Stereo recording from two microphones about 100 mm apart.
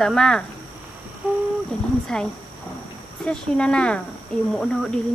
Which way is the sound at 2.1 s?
5° left (ahead or behind).